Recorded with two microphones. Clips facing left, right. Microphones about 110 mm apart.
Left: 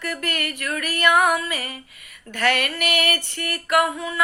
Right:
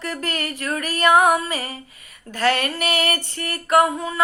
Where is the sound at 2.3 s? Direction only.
30° right (ahead or behind).